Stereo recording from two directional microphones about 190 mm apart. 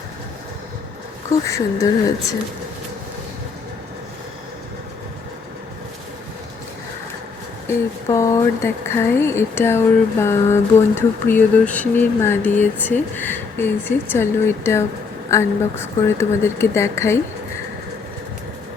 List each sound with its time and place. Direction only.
1.5 s speech: 15° left (ahead or behind)
7.7 s speech: 15° left (ahead or behind)